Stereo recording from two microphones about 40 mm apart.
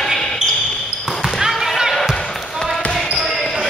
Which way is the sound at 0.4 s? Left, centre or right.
Right.